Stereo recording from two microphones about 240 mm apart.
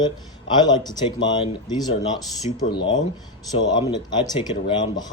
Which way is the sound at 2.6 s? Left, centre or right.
Left.